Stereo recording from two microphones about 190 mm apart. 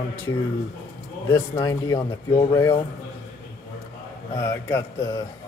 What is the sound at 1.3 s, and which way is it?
A man's voice, 20° left (ahead or behind).